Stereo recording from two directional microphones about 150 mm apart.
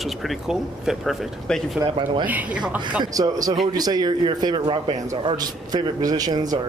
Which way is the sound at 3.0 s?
25° right (ahead or behind).